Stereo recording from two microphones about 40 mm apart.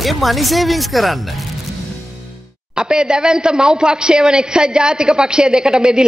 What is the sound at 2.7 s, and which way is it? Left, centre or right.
A man's voice, right.